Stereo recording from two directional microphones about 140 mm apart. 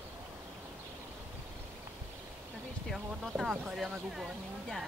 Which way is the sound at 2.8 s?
Centre (ahead or behind).